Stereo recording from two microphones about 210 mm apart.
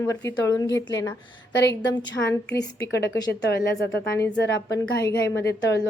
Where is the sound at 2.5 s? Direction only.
55° left (ahead or behind).